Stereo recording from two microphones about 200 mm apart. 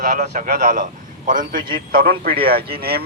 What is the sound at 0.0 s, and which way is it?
A man's voice, 40° right (ahead or behind).